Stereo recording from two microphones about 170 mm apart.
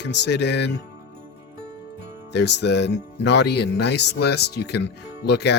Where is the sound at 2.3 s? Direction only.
90° left.